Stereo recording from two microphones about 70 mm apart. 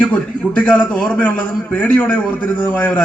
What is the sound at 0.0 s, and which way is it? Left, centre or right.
A man's voice, left.